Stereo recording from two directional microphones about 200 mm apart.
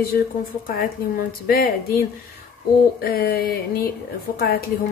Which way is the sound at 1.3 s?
50° left (ahead or behind).